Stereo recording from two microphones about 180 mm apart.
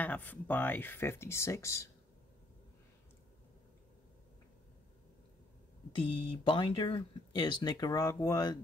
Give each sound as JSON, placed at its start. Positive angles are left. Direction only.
{"t": 0.0, "sound": "speech", "side_deg": 10}
{"t": 5.9, "sound": "speech", "side_deg": 30}